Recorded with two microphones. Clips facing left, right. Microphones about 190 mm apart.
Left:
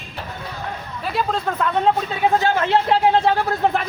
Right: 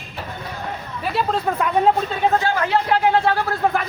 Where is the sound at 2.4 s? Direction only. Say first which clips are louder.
Left 2 dB; 25° left (ahead or behind).